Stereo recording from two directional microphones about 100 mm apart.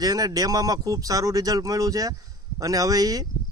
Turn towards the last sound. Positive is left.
turn(degrees=-35)  # may be behind; listen again after turning